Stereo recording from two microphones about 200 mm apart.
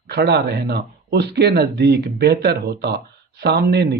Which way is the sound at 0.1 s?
55° right (ahead or behind).